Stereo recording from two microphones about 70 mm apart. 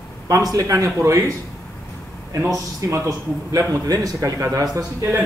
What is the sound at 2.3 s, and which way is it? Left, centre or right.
A man's voice, right.